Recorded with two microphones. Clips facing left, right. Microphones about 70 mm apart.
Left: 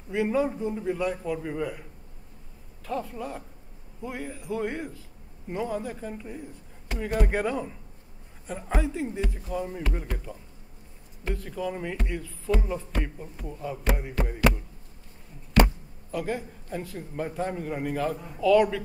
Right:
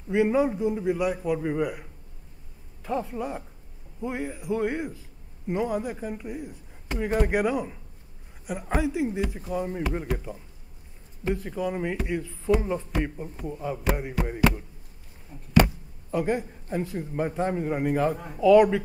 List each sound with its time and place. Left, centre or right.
0.1 s a man's voice: centre
16.1 s a man's voice: right